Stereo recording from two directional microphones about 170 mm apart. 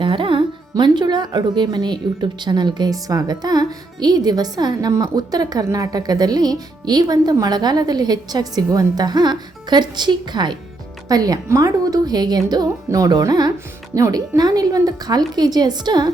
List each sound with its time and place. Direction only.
0.0 s speech: 30° right (ahead or behind)